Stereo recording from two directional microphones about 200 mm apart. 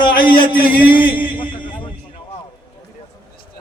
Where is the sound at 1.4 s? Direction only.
25° left (ahead or behind).